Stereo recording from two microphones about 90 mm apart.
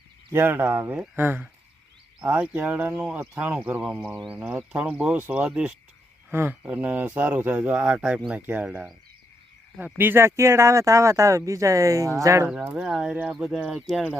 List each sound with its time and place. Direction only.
0.3 s speech: 25° right (ahead or behind); by 5.7 s 10° right (ahead or behind)
6.3 s speech: 20° right (ahead or behind)
12.8 s speech: 5° right (ahead or behind)